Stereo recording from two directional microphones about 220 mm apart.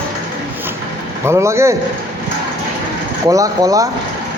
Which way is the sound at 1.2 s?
15° right (ahead or behind).